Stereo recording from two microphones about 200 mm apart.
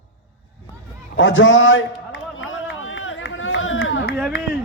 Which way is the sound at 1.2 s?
70° left (ahead or behind).